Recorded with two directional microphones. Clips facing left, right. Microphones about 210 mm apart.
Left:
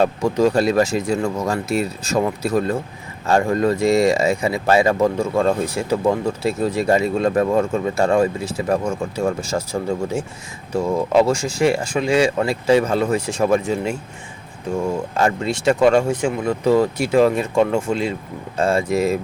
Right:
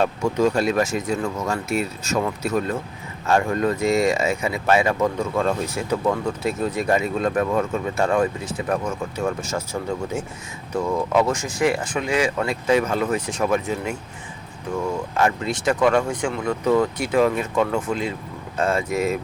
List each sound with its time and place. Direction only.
0.0 s speech: 35° left (ahead or behind)
10.8 s speech: 30° left (ahead or behind)
15.1 s speech: 30° left (ahead or behind)